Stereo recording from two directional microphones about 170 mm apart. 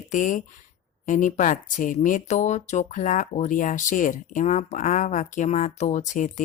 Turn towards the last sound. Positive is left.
turn(degrees=45)  # may be behind; listen again after turning